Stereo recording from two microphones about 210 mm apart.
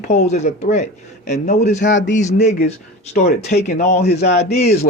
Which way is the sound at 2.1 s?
35° left (ahead or behind).